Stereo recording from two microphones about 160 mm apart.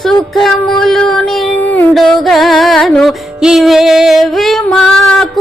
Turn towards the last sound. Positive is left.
turn(degrees=5)  # may be behind; listen again after turning